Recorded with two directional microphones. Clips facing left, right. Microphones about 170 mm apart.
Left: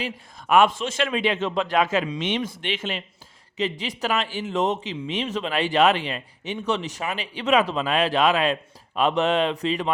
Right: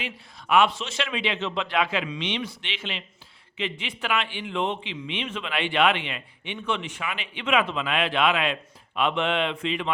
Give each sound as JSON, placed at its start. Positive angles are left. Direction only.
{"t": 0.0, "sound": "a man's voice", "side_deg": 45}